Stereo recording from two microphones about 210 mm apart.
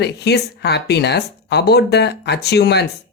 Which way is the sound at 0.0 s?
55° left (ahead or behind).